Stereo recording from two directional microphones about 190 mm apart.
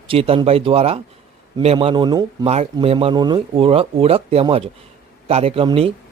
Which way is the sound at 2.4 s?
35° right (ahead or behind).